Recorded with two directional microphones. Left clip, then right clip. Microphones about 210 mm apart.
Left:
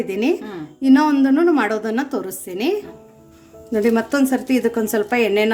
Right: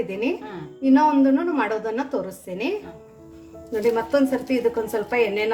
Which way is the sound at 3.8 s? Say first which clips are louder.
Left 2 dB; 55° left (ahead or behind).